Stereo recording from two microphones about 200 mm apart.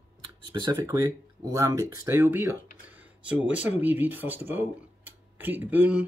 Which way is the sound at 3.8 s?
10° right (ahead or behind).